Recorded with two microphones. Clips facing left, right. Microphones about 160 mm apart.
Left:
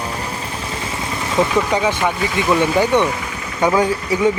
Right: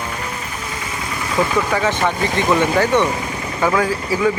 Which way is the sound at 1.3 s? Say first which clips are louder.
Left 1 dB; 25° left (ahead or behind).